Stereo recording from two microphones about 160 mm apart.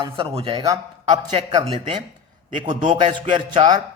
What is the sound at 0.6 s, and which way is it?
A man's voice, 20° right (ahead or behind).